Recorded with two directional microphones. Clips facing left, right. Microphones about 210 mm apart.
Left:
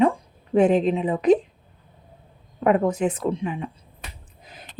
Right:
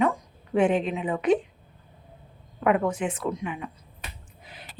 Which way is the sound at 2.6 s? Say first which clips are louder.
Left 4 dB; 35° left (ahead or behind).